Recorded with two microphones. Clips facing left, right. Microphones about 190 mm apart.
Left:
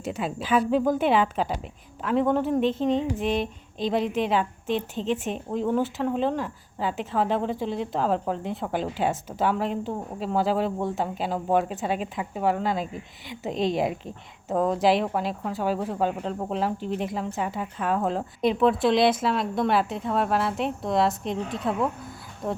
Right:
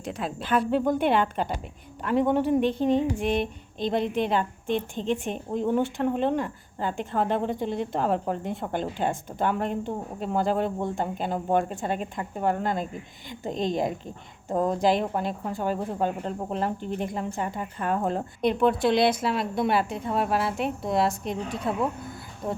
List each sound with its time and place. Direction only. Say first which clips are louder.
0.0 s speech: left 2 dB; centre (ahead or behind)